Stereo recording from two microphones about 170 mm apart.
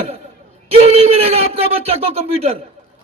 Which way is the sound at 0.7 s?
35° right (ahead or behind).